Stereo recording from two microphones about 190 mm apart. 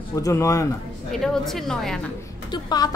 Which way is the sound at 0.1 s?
15° left (ahead or behind).